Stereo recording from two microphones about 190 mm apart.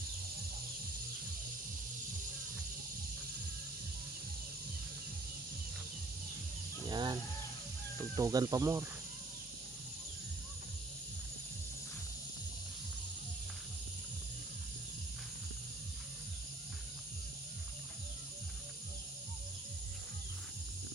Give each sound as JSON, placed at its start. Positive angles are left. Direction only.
{"t": 6.8, "sound": "fowl", "side_deg": -20}
{"t": 8.1, "sound": "speech", "side_deg": -20}